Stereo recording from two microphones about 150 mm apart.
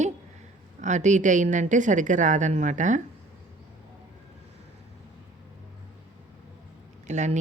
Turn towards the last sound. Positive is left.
turn(degrees=-50)  # may be behind; listen again after turning